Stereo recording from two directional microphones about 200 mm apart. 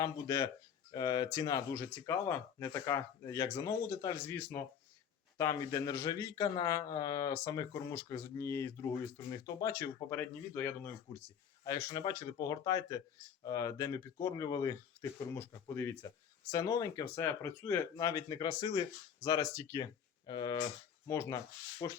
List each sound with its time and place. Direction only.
0.0 s speech: 20° left (ahead or behind)